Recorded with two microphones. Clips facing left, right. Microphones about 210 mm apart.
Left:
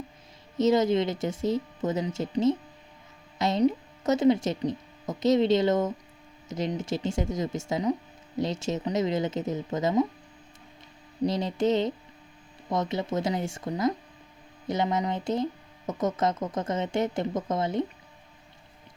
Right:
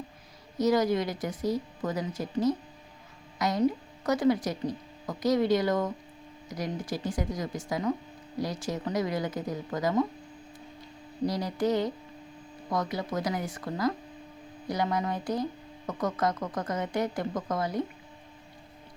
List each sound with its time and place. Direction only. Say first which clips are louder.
0.6 s speech: left 3 dB; 25° left (ahead or behind)
11.2 s speech: left 3 dB; 25° left (ahead or behind)